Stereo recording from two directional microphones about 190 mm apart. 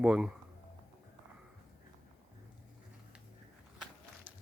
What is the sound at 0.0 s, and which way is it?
Speech, 5° right (ahead or behind).